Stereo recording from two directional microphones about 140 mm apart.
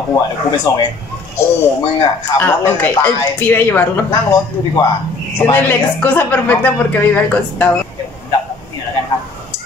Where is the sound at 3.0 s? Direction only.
15° left (ahead or behind).